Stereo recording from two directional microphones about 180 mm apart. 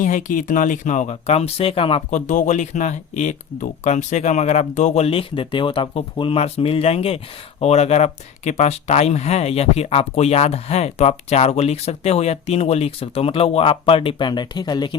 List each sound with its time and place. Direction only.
0.0 s speech: 45° left (ahead or behind)
2.0 s speech: 45° left (ahead or behind); by 14.9 s 25° left (ahead or behind)